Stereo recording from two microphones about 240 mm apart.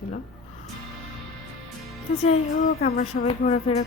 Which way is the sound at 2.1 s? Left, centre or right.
Left.